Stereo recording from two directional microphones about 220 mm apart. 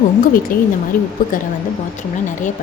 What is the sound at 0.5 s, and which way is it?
Speech, 40° left (ahead or behind).